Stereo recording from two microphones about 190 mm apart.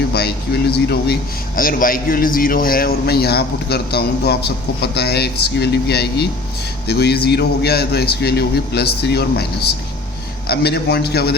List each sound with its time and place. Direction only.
0.1 s a man's voice: 60° left (ahead or behind)